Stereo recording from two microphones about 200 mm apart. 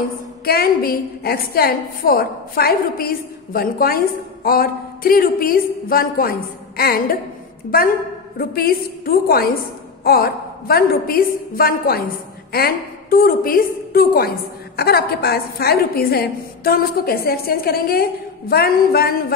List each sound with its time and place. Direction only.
0.5 s a woman's voice: 50° left (ahead or behind)